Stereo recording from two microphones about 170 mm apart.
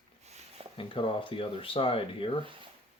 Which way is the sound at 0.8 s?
30° left (ahead or behind).